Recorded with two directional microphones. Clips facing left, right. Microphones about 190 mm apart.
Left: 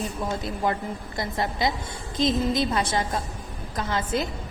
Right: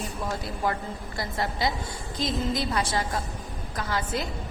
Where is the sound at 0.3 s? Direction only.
20° left (ahead or behind).